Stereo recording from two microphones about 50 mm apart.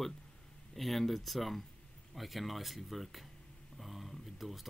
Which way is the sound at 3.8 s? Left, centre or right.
Centre.